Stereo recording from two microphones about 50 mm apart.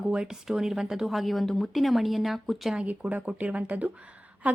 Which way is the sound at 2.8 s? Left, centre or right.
Right.